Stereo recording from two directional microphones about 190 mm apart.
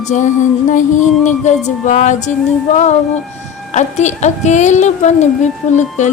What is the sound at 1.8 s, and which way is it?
Speech, 40° left (ahead or behind).